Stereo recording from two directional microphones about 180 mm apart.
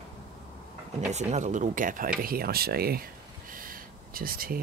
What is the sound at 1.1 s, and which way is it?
Speech, 40° right (ahead or behind).